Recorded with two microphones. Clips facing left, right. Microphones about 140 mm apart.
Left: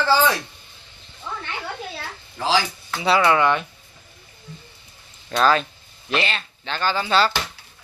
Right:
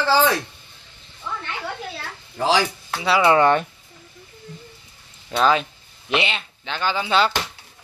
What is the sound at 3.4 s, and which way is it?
Speech, 40° right (ahead or behind).